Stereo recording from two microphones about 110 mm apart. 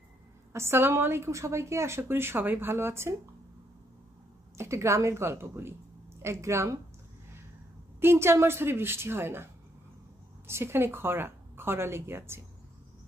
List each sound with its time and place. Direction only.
0.5 s a woman's voice: 25° right (ahead or behind)
4.6 s a woman's voice: 25° right (ahead or behind)
8.0 s a woman's voice: 20° right (ahead or behind)